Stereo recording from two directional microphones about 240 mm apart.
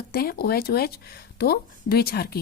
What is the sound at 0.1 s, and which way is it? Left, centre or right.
Speech, left.